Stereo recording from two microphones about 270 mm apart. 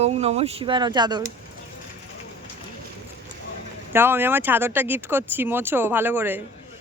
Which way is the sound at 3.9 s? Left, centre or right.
Centre.